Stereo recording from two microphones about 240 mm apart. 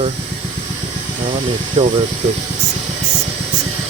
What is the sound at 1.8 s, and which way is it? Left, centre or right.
Speech, right.